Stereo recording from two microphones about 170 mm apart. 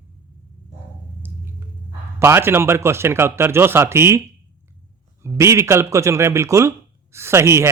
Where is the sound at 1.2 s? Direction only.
10° right (ahead or behind).